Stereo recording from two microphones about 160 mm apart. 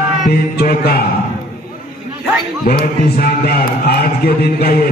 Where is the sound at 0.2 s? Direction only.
70° left (ahead or behind).